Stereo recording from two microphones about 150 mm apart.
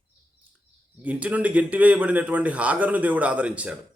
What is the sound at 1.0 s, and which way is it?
Speech, 10° right (ahead or behind).